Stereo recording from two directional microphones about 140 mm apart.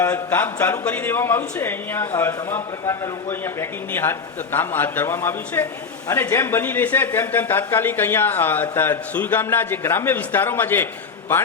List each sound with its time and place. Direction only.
0.0 s speech: 15° left (ahead or behind)